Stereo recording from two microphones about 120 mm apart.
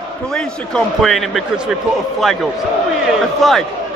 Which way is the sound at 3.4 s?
Centre (ahead or behind).